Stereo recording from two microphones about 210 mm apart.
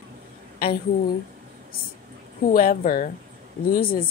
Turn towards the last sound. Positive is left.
turn(degrees=45)  # may be behind; listen again after turning